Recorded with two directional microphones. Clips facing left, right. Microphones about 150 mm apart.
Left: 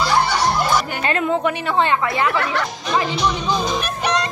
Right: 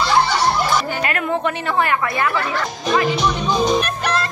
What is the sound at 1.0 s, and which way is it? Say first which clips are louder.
A woman's voice: left 2 dB; 20° left (ahead or behind).